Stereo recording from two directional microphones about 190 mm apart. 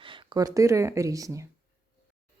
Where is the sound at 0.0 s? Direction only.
25° right (ahead or behind).